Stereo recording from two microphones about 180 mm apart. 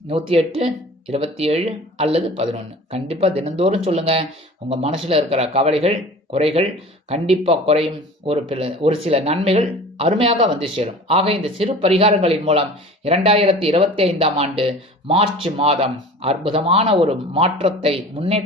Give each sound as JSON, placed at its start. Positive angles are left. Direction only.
{"t": 0.1, "sound": "speech", "side_deg": -30}